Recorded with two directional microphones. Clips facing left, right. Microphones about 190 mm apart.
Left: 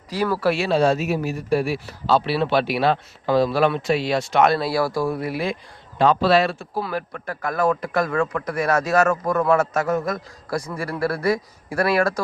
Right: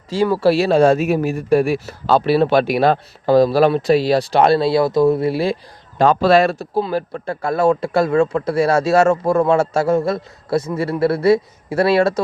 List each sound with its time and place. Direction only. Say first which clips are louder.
0.1 s speech: right 6 dB; 25° right (ahead or behind)
6.0 s a man's voice: right 4 dB; 45° right (ahead or behind)
6.7 s speech: right 7 dB; 30° right (ahead or behind)